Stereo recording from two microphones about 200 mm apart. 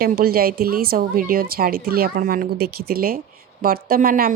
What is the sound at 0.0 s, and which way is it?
Speech, 50° right (ahead or behind).